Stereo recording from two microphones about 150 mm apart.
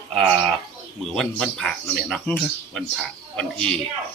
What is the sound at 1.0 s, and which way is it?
Speech, centre (ahead or behind).